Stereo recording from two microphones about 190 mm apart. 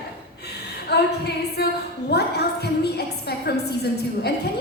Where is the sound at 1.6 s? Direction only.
55° left (ahead or behind).